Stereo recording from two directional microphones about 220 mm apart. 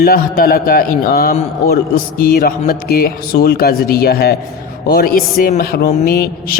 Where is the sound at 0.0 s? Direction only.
40° left (ahead or behind).